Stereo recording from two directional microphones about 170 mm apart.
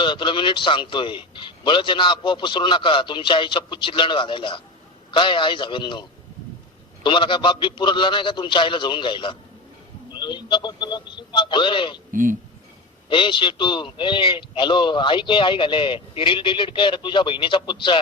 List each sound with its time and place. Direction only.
0.0 s a man's voice: 30° left (ahead or behind)
12.1 s speech: 50° right (ahead or behind)
13.1 s a man's voice: 30° left (ahead or behind)